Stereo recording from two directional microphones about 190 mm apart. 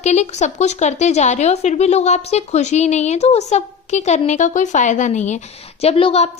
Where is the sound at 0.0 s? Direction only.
35° left (ahead or behind).